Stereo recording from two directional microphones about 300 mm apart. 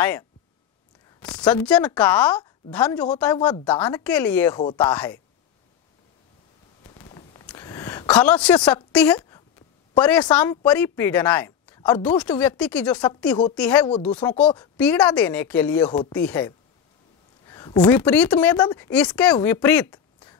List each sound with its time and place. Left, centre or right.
1.2 s speech: centre
3.3 s speech: centre
3.6 s speech: centre
6.8 s a sound: centre
8.6 s a woman's voice: centre